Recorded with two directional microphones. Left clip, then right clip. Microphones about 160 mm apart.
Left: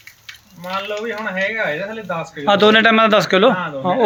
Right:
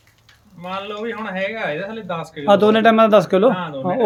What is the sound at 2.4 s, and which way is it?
A man's voice, 5° right (ahead or behind).